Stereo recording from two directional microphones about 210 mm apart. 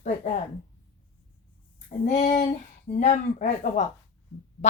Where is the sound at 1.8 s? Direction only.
35° left (ahead or behind).